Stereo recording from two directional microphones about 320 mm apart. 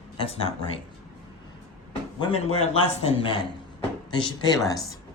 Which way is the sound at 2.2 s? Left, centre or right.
Centre.